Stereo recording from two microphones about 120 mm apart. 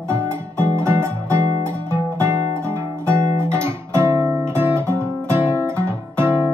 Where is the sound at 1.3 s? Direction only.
20° right (ahead or behind).